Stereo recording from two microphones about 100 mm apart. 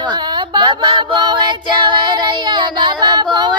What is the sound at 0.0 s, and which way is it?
Female singing, 45° right (ahead or behind).